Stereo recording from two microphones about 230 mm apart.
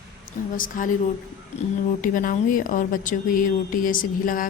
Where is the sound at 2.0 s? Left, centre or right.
Left.